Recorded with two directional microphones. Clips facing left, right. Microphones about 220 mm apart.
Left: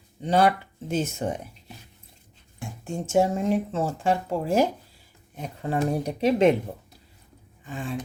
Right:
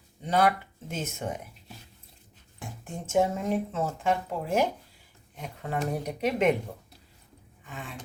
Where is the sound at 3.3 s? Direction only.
30° left (ahead or behind).